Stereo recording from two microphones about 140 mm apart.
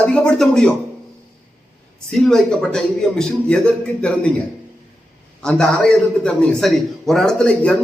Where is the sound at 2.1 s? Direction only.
5° left (ahead or behind).